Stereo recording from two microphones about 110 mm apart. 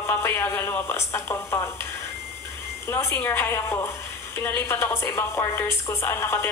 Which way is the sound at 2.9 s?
20° left (ahead or behind).